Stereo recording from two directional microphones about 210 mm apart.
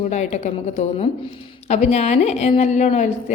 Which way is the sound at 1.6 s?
30° left (ahead or behind).